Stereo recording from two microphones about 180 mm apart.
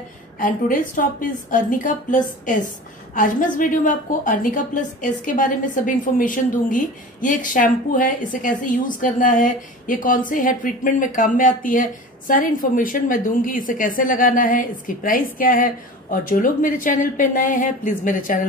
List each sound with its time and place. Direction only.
0.4 s a woman's voice: 50° left (ahead or behind)